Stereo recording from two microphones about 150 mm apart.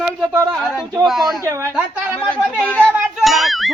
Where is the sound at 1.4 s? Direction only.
20° right (ahead or behind).